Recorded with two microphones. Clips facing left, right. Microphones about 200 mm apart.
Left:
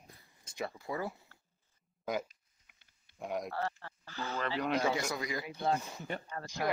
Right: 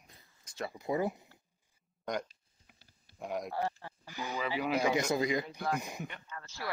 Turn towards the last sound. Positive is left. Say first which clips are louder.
# left 8 dB
turn(degrees=35)  # may be behind; listen again after turning